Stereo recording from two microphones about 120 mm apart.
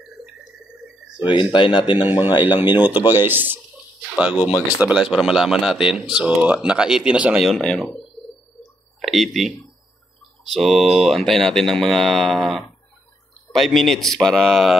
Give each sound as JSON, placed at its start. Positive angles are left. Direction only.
{"t": 1.2, "sound": "speech", "side_deg": 40}
{"t": 2.0, "sound": "speech", "side_deg": -15}
{"t": 7.4, "sound": "speech", "side_deg": 5}
{"t": 9.0, "sound": "speech", "side_deg": 0}
{"t": 10.5, "sound": "speech", "side_deg": 0}